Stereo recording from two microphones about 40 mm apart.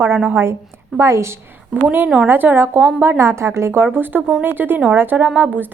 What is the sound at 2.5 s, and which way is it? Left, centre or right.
A woman's voice, right.